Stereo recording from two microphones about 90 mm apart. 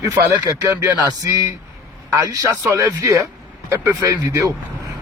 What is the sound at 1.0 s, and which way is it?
Speech, 40° right (ahead or behind).